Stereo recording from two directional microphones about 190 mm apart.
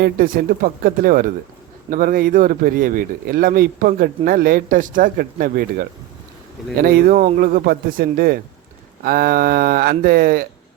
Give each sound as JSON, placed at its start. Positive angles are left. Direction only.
{"t": 0.0, "sound": "speech", "side_deg": -50}